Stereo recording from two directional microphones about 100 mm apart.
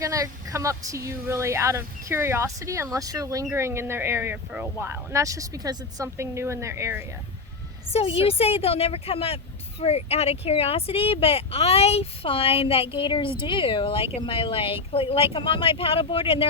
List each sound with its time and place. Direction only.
0.0 s speech: 35° right (ahead or behind)
7.9 s a woman's voice: 75° left (ahead or behind)
9.8 s speech: 90° left; by 16.5 s 65° left (ahead or behind)